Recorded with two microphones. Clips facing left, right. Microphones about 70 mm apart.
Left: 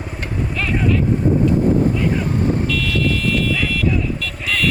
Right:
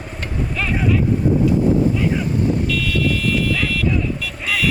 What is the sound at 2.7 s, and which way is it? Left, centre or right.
Vehicle, centre.